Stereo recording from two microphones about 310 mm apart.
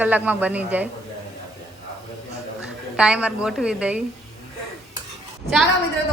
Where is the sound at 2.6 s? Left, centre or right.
Centre.